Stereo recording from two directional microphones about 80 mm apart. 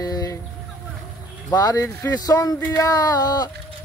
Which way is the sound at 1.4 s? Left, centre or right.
Left.